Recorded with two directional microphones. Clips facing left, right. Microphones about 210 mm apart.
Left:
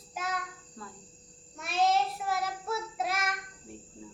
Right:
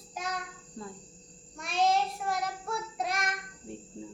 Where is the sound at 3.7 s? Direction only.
25° right (ahead or behind).